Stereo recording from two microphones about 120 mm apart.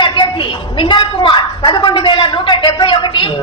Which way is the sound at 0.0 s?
40° left (ahead or behind).